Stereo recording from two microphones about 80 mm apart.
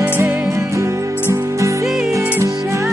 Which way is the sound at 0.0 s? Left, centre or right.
Right.